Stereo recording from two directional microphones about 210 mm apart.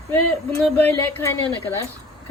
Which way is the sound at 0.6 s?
10° left (ahead or behind).